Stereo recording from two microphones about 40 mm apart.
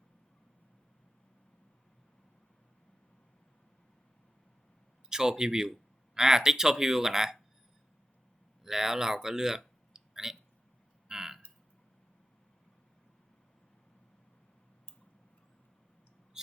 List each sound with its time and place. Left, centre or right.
5.0 s speech: centre
8.6 s speech: centre
9.9 s clicking: centre
11.1 s a sound: centre